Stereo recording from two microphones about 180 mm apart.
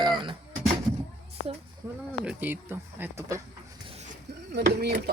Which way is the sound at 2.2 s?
10° right (ahead or behind).